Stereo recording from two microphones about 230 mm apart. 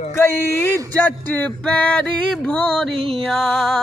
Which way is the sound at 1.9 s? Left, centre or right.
Centre.